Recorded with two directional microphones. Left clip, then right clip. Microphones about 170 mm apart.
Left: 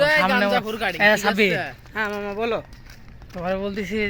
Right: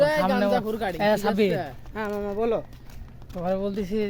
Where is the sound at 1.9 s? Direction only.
10° right (ahead or behind).